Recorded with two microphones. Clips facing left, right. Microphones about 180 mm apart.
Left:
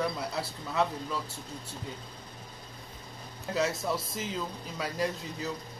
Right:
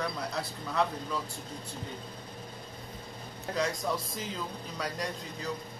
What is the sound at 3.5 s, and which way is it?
A man's voice, 5° left (ahead or behind).